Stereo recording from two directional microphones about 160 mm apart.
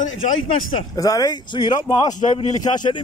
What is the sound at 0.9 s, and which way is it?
Speech, 25° left (ahead or behind).